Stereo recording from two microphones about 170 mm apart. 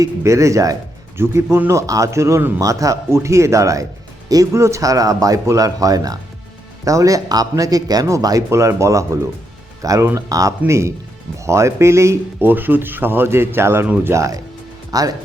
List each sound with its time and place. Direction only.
0.0 s a man's voice: 15° right (ahead or behind)
14.8 s music: 20° right (ahead or behind)